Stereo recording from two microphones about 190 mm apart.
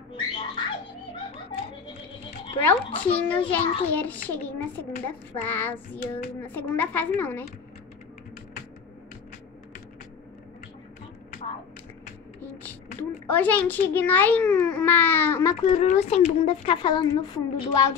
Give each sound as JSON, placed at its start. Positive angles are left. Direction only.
{"t": 0.1, "sound": "a sound", "side_deg": 25}
{"t": 2.6, "sound": "a child's voice", "side_deg": 10}
{"t": 13.3, "sound": "a child's voice", "side_deg": 10}
{"t": 15.6, "sound": "a woman's voice", "side_deg": 30}